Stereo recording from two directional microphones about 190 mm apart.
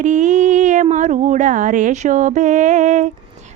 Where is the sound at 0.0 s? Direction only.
40° right (ahead or behind).